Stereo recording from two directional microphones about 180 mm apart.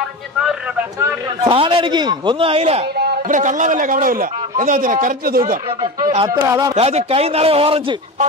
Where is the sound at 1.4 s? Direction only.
30° right (ahead or behind).